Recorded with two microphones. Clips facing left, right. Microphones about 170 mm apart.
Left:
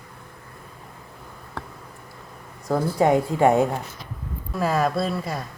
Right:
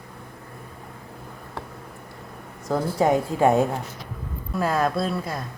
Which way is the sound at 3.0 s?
20° left (ahead or behind).